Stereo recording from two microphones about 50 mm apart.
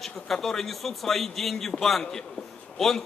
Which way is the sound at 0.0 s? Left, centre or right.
Centre.